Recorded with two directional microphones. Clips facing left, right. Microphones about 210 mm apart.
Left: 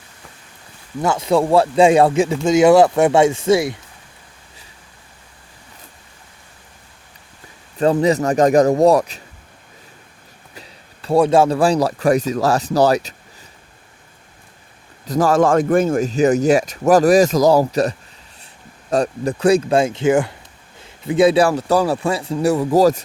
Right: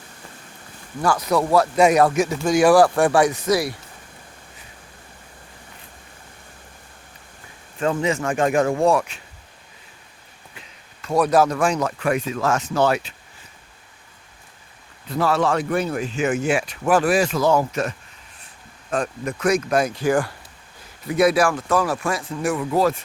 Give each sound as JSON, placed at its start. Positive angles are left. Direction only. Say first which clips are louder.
{"t": 1.0, "sound": "speech", "louder": "left 3 dB", "side_deg": 25}
{"t": 7.8, "sound": "speech", "louder": "left 6 dB", "side_deg": 35}
{"t": 10.5, "sound": "speech", "louder": "left 7 dB", "side_deg": 35}
{"t": 15.0, "sound": "speech", "louder": "left 6 dB", "side_deg": 45}